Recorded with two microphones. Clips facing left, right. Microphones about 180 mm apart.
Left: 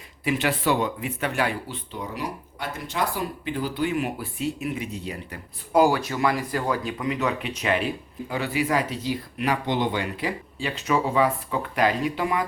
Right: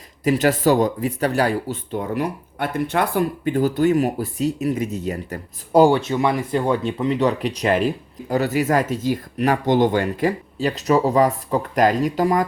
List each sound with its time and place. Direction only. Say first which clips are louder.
0.3 s speech: right 7 dB; 40° right (ahead or behind)
5.8 s speech: right 5 dB; 25° right (ahead or behind)